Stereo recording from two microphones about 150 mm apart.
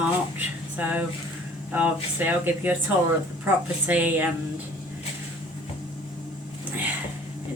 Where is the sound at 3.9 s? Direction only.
10° right (ahead or behind).